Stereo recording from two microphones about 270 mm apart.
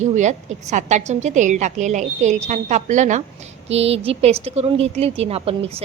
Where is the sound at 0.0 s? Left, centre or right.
Right.